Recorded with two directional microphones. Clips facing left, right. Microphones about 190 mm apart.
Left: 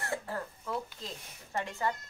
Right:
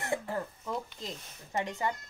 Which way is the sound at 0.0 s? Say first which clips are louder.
Right 3 dB; 20° right (ahead or behind).